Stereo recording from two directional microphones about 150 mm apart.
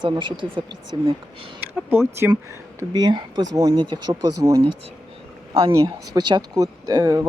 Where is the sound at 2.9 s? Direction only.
30° right (ahead or behind).